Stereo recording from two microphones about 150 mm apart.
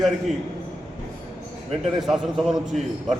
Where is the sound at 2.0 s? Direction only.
Centre (ahead or behind).